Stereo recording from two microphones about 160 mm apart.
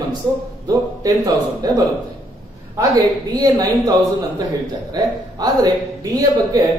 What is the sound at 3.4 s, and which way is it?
Speech, 20° right (ahead or behind).